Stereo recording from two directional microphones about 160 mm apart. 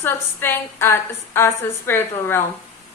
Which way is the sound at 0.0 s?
15° left (ahead or behind).